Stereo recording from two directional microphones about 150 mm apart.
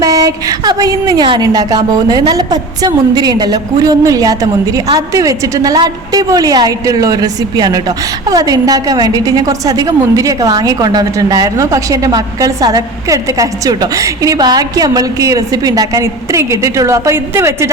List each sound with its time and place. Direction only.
0.0 s a woman's voice: 25° right (ahead or behind)